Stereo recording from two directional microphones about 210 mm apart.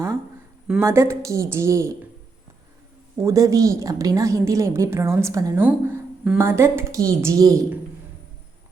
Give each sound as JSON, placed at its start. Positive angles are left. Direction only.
{"t": 0.7, "sound": "a woman's voice", "side_deg": -15}
{"t": 3.2, "sound": "a woman's voice", "side_deg": -15}